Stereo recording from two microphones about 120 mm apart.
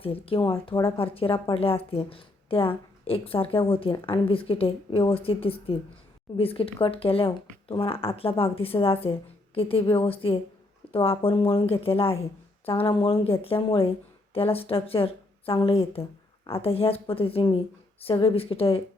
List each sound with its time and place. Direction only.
0.0 s a woman's voice: 50° left (ahead or behind)